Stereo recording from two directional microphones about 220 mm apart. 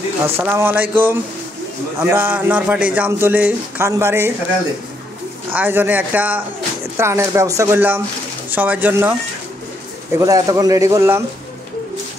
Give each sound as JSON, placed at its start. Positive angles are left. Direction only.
{"t": 0.4, "sound": "speech", "side_deg": -10}
{"t": 5.5, "sound": "speech", "side_deg": -10}
{"t": 10.1, "sound": "speech", "side_deg": -15}